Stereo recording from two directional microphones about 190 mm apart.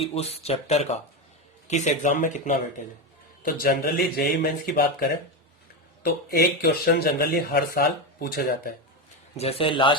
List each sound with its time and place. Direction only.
0.0 s speech: 30° left (ahead or behind)
3.4 s speech: 55° left (ahead or behind)
9.3 s a man's voice: 30° left (ahead or behind)